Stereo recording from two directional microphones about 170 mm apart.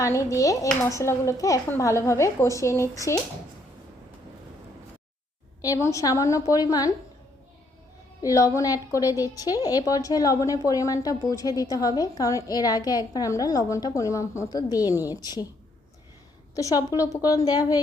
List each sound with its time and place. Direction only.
0.0 s a child's voice: 20° left (ahead or behind)
5.6 s a woman's voice: 20° left (ahead or behind)
8.2 s a woman's voice: 20° left (ahead or behind)
16.6 s a woman's voice: 20° left (ahead or behind)